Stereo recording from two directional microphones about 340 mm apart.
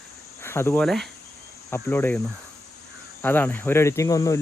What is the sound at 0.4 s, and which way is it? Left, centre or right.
Speech, centre.